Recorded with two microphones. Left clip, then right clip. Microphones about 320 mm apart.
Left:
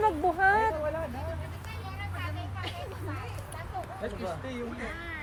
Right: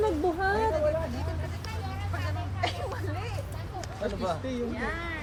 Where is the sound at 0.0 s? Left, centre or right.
Centre.